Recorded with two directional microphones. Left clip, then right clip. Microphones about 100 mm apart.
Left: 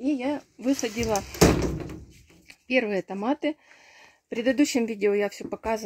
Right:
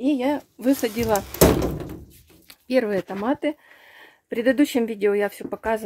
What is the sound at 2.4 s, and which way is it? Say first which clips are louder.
Speech: right 3 dB; 10° right (ahead or behind).